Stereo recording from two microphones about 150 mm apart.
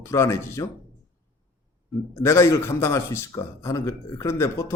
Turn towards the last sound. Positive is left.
turn(degrees=20)  # may be behind; listen again after turning